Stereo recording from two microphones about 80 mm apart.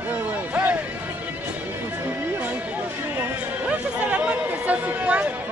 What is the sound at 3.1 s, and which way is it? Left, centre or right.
Music, centre.